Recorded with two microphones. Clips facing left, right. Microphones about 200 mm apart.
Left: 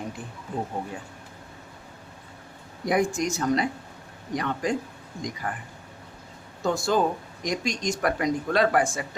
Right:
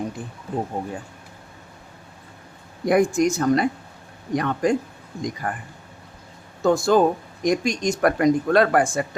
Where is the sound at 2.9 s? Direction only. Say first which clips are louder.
Right 6 dB; 50° right (ahead or behind).